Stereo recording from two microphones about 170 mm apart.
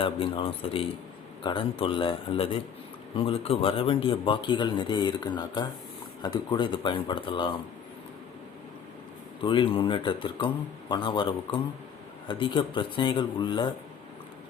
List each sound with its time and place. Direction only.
0.0 s a man's voice: 30° left (ahead or behind)
9.4 s a man's voice: 30° left (ahead or behind)